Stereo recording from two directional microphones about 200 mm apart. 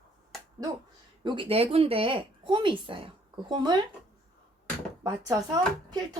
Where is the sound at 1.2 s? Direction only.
25° right (ahead or behind).